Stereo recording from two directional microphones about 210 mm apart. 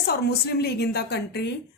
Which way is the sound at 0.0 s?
50° left (ahead or behind).